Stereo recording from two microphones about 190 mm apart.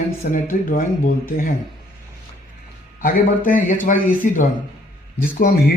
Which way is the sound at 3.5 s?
45° left (ahead or behind).